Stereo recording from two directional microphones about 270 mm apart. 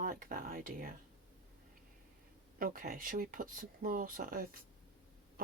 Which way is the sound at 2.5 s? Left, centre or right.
Right.